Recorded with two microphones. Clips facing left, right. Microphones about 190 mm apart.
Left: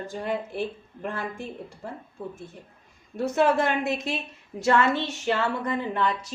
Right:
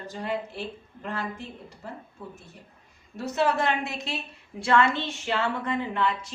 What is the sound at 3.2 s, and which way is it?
A woman's voice, 50° left (ahead or behind).